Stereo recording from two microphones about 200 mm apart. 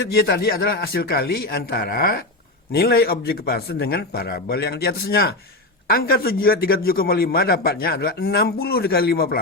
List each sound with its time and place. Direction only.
0.1 s a man's voice: 50° left (ahead or behind)